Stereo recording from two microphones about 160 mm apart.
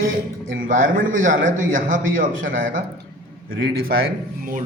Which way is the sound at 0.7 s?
55° right (ahead or behind).